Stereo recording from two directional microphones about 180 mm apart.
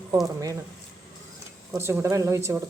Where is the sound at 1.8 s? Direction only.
15° right (ahead or behind).